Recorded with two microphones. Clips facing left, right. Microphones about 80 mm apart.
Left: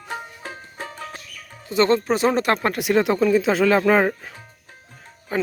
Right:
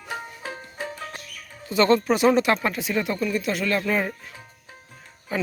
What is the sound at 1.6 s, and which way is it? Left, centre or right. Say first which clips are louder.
Speech: left 1 dB; left.